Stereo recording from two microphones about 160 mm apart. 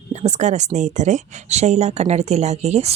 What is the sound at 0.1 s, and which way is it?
Speech, 45° right (ahead or behind).